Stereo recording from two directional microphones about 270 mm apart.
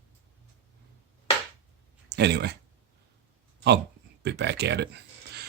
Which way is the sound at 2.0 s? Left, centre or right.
Right.